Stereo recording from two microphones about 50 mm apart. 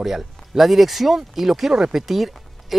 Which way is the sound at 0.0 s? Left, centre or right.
Centre.